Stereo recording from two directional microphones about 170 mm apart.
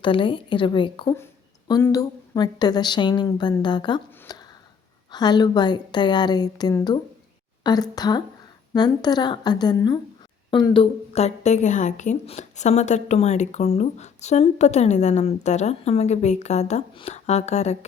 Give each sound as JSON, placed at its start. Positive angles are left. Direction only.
{"t": 0.0, "sound": "a woman's voice", "side_deg": 30}